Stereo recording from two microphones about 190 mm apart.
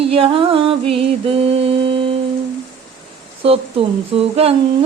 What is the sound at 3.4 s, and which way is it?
Humming, 30° right (ahead or behind).